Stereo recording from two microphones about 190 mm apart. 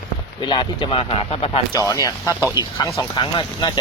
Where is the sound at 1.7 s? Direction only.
20° left (ahead or behind).